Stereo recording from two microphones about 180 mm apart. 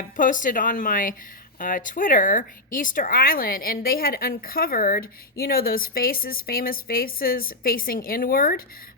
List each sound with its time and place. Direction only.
0.2 s a woman's voice: 45° left (ahead or behind)